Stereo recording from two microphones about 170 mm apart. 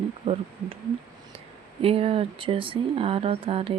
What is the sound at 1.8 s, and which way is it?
Speech, 35° right (ahead or behind).